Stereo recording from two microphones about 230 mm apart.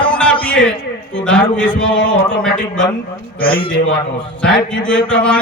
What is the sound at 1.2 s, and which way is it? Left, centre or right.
Speech, centre.